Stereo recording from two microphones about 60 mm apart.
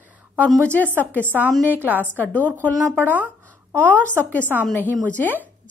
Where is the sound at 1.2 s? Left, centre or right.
Right.